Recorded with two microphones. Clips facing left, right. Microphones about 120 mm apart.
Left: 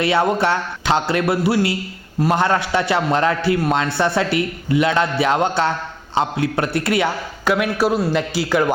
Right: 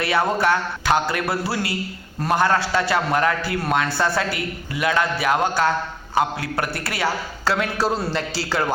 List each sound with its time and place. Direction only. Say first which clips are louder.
0.0 s a man's voice: left 3 dB; 25° left (ahead or behind)